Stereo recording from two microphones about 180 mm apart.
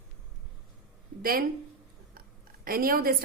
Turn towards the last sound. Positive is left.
turn(degrees=-55)  # may be behind; listen again after turning